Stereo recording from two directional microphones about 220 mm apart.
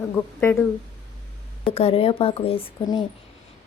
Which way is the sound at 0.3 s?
10° left (ahead or behind).